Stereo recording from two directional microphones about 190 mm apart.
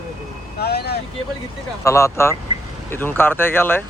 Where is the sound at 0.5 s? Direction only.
55° left (ahead or behind).